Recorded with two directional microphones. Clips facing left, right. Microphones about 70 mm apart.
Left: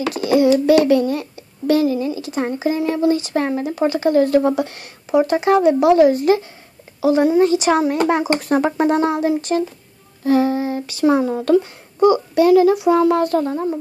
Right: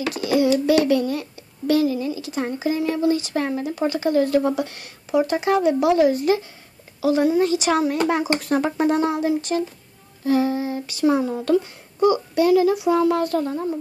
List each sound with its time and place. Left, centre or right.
0.1 s speech: left
7.0 s speech: left
8.3 s speech: left
8.6 s speech: left
10.2 s speech: left
13.1 s speech: left